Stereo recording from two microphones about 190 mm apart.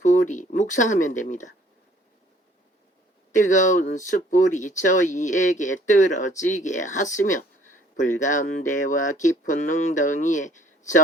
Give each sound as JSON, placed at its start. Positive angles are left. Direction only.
{"t": 0.0, "sound": "speech", "side_deg": 40}
{"t": 3.3, "sound": "speech", "side_deg": 40}